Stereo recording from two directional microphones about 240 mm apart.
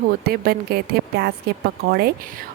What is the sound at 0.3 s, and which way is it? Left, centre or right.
A woman's voice, right.